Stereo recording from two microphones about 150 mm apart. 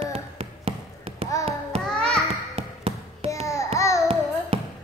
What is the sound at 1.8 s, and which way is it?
Music, 5° left (ahead or behind).